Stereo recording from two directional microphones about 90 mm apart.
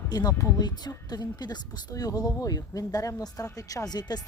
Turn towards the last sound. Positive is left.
turn(degrees=50)  # may be behind; listen again after turning